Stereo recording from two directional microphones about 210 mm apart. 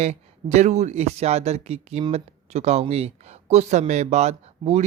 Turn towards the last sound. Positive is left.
turn(degrees=-30)  # may be behind; listen again after turning